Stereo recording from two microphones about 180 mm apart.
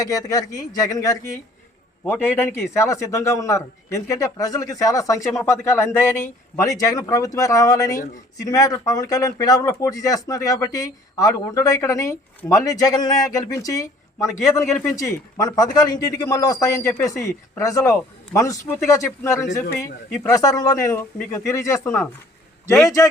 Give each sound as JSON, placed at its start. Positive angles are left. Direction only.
{"t": 0.0, "sound": "a man's voice", "side_deg": 20}
{"t": 20.1, "sound": "a man's voice", "side_deg": 0}
{"t": 20.3, "sound": "a man's voice", "side_deg": 20}